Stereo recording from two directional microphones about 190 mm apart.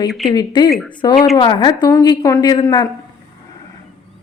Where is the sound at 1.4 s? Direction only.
25° left (ahead or behind).